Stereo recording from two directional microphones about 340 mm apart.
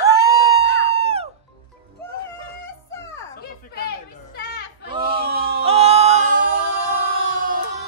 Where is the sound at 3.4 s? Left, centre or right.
Left.